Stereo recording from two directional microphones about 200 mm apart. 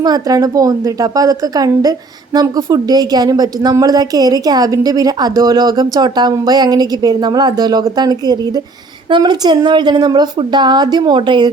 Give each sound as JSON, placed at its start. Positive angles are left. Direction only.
{"t": 0.0, "sound": "a woman's voice", "side_deg": -20}